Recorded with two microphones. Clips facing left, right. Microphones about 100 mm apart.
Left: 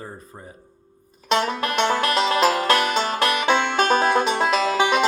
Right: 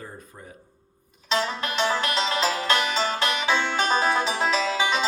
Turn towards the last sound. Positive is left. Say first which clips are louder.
# left 5 dB
turn(degrees=55)  # may be behind; listen again after turning